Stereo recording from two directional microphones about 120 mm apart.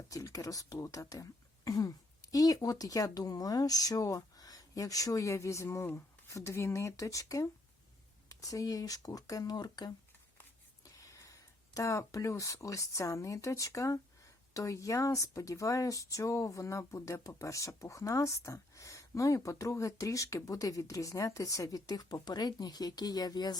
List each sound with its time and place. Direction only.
0.1 s speech: 25° left (ahead or behind)